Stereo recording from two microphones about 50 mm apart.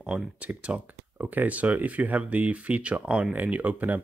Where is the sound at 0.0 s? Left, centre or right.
Right.